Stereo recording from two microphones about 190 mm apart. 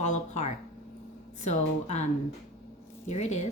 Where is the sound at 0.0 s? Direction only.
40° left (ahead or behind).